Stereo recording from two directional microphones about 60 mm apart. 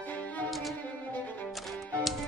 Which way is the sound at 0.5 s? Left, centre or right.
Centre.